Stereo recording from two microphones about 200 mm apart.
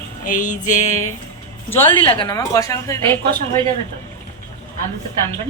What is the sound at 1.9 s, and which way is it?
A woman's voice, 25° left (ahead or behind).